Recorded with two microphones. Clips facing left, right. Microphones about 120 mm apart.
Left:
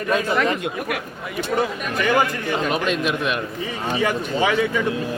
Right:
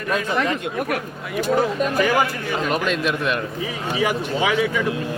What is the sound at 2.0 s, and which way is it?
Speech, 5° right (ahead or behind).